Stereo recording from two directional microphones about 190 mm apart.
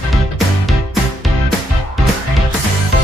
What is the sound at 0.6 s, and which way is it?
Music, centre (ahead or behind).